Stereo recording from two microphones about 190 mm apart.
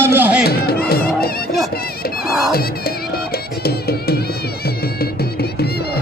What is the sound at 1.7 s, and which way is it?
Speech, 55° left (ahead or behind).